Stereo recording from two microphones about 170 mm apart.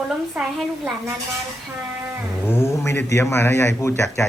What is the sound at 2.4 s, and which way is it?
A man's voice, 15° left (ahead or behind).